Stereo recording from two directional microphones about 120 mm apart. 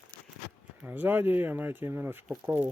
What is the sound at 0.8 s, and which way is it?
Speech, 15° right (ahead or behind).